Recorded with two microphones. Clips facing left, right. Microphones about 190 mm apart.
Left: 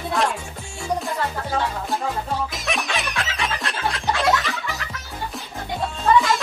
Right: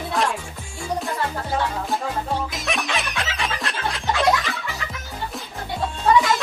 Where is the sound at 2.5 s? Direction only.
Centre (ahead or behind).